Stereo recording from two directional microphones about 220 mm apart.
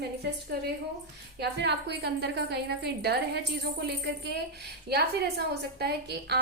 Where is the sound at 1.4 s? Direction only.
50° right (ahead or behind).